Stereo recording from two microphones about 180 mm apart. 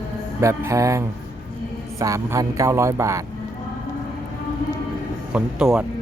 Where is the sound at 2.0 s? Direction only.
20° right (ahead or behind).